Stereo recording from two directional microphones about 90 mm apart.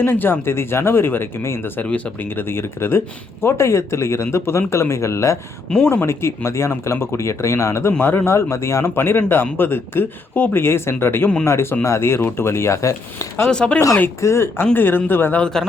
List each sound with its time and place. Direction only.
0.0 s speech: 25° left (ahead or behind)
13.5 s speech: 10° left (ahead or behind)
14.2 s speech: 30° left (ahead or behind)
15.4 s speech: 5° left (ahead or behind)